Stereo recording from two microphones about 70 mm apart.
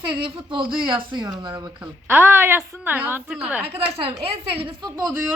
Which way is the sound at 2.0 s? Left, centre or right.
Right.